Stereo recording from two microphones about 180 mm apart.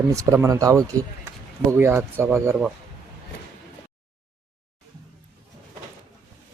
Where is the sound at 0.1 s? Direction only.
15° right (ahead or behind).